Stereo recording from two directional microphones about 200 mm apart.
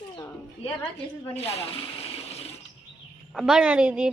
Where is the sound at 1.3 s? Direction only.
30° left (ahead or behind).